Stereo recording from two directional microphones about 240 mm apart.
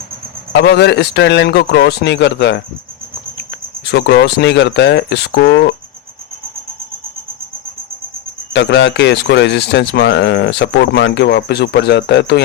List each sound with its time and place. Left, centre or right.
0.5 s speech: left
3.8 s speech: left
8.5 s speech: left